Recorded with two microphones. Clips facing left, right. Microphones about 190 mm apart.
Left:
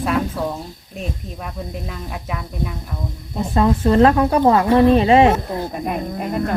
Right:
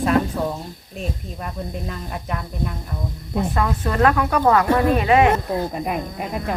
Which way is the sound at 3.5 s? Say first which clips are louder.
Left 11 dB; 25° left (ahead or behind).